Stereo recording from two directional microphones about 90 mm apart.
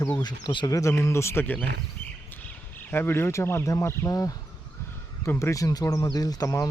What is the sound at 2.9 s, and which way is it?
Speech, 25° left (ahead or behind).